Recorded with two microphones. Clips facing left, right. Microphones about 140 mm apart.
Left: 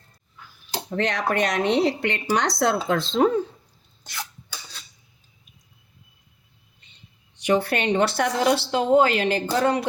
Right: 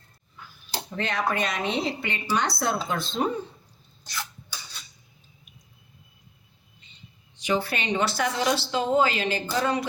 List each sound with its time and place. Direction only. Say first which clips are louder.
0.9 s speech: left 3 dB; 75° left (ahead or behind)
7.3 s speech: left 5 dB; 65° left (ahead or behind)